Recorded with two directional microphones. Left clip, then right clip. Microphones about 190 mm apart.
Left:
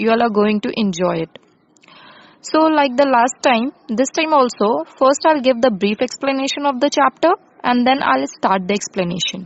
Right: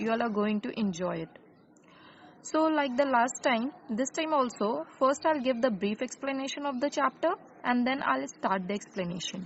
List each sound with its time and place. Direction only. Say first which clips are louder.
0.0 s a woman's voice: left 15 dB; 50° left (ahead or behind)
2.5 s a woman's voice: left 13 dB; 50° left (ahead or behind)